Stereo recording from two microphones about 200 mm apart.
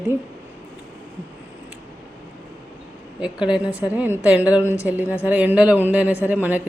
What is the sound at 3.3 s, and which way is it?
Speech, 20° left (ahead or behind).